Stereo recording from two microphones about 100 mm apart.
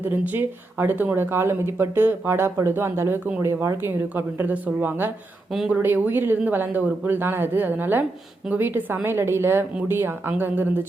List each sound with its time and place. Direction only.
0.0 s speech: 20° right (ahead or behind)
5.5 s speech: 5° right (ahead or behind)
5.7 s speech: 20° right (ahead or behind)